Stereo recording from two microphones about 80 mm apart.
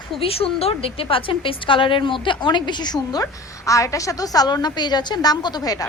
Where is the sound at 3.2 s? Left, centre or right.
Left.